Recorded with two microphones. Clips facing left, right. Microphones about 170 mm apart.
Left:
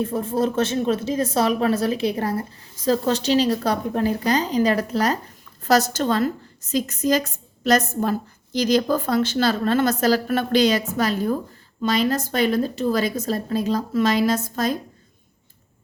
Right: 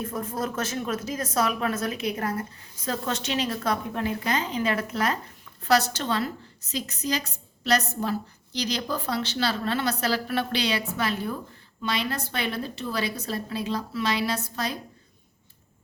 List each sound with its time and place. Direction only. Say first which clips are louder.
0.0 s a woman's voice: left 8 dB; 30° left (ahead or behind); by 14.8 s 45° left (ahead or behind)